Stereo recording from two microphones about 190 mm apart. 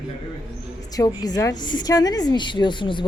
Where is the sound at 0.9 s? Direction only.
20° left (ahead or behind).